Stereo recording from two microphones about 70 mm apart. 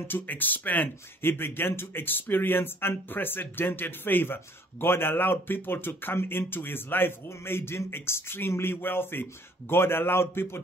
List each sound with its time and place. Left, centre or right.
0.1 s speech: left